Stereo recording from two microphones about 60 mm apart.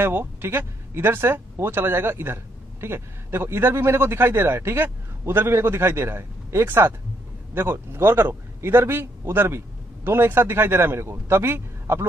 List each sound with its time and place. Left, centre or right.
0.0 s speech: right